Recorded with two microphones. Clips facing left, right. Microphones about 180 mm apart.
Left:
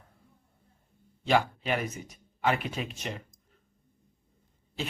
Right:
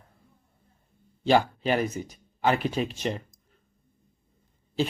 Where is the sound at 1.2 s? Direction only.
35° right (ahead or behind).